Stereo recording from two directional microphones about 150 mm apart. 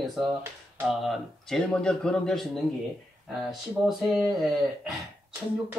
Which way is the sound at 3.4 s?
Centre (ahead or behind).